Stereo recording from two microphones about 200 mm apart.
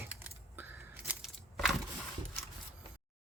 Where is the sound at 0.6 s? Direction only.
10° right (ahead or behind).